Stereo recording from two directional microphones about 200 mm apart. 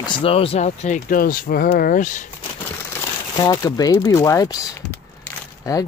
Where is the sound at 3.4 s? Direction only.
20° left (ahead or behind).